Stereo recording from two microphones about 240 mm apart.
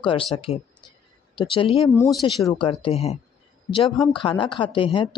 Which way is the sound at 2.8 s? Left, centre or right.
Left.